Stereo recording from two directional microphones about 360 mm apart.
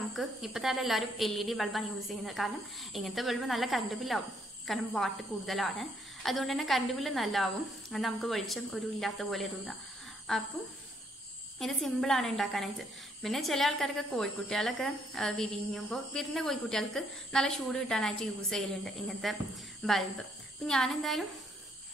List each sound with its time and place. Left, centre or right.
0.1 s a woman's voice: centre
11.6 s a woman's voice: centre